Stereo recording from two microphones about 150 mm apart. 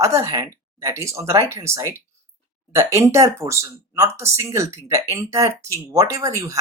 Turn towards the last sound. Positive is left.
turn(degrees=-20)  # may be behind; listen again after turning